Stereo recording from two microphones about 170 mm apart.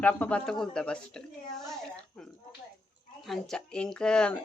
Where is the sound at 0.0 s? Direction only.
10° left (ahead or behind).